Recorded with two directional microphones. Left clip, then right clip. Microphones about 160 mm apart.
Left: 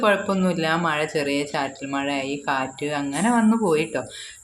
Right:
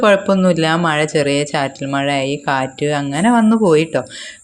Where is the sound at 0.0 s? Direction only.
40° right (ahead or behind).